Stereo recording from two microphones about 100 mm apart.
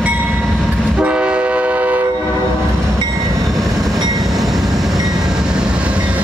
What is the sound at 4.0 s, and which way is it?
Train, 40° right (ahead or behind).